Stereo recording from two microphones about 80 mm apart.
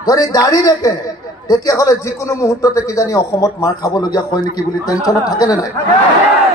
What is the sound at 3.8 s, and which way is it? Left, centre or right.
A man's voice, left.